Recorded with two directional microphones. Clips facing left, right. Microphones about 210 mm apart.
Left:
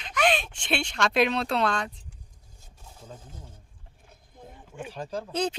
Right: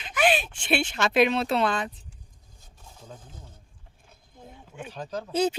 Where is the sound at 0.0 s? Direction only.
5° right (ahead or behind).